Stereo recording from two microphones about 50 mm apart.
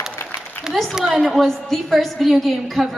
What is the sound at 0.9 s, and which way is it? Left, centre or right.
Speech, centre.